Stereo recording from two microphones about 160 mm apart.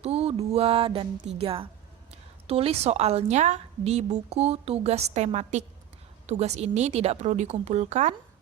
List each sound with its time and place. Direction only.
0.0 s mantra: 40° right (ahead or behind)
2.5 s a woman's voice: 40° right (ahead or behind)